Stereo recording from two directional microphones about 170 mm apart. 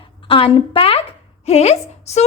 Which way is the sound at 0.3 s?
35° left (ahead or behind).